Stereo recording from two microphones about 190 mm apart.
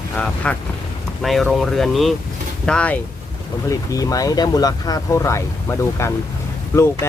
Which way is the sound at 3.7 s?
20° left (ahead or behind).